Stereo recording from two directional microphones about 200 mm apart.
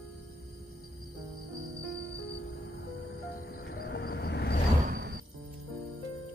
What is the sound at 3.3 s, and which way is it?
Music, 50° left (ahead or behind).